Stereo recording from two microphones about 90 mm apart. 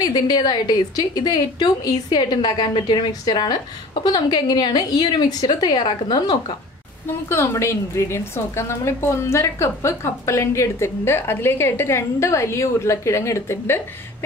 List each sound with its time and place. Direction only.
0.0 s a woman's voice: 50° left (ahead or behind)
3.1 s a woman's voice: 50° left (ahead or behind)
7.2 s a woman's voice: 30° left (ahead or behind)